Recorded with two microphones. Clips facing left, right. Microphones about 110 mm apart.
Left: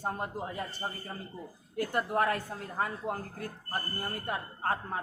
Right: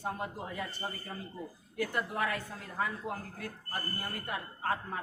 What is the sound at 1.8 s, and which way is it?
A woman's voice, 40° left (ahead or behind).